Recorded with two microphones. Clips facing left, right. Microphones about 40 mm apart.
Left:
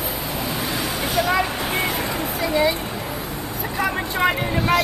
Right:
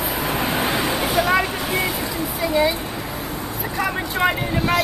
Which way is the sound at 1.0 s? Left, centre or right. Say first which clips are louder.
Even; centre.